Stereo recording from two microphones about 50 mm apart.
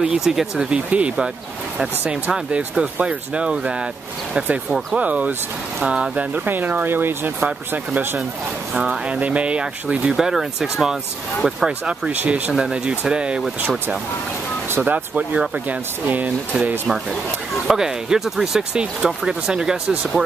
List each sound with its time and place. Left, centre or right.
0.0 s speech: centre
0.7 s speech: right
2.3 s speech: centre
4.9 s speech: right
6.4 s speech: right
7.3 s speech: right
8.7 s speech: centre
9.2 s speech: right
10.1 s speech: centre
12.1 s speech: right
14.8 s speech: right
17.6 s speech: centre